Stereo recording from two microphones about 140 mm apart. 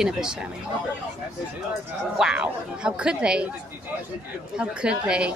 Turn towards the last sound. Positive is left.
turn(degrees=-5)  # may be behind; listen again after turning